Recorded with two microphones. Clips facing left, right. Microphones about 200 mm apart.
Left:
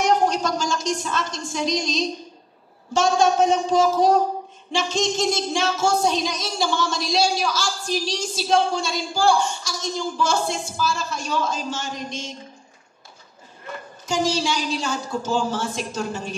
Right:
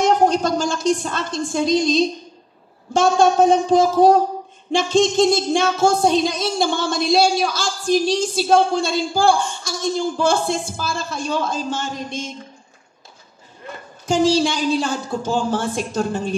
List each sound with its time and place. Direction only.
0.2 s a woman's voice: 55° right (ahead or behind)
14.0 s a man's voice: 55° right (ahead or behind)